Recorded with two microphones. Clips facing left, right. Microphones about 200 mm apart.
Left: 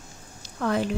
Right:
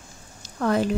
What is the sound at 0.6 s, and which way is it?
Speech, 40° right (ahead or behind).